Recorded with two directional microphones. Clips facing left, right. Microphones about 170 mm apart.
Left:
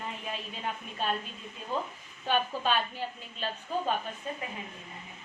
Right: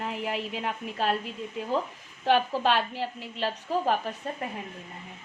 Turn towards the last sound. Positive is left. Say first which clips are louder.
# right 5 dB
turn(degrees=-60)  # may be behind; listen again after turning